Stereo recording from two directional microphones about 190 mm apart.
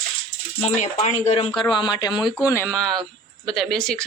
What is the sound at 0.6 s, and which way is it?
Speech, 40° left (ahead or behind).